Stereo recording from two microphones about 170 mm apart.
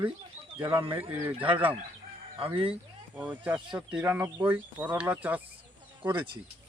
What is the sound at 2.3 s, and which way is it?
Speech, 30° right (ahead or behind).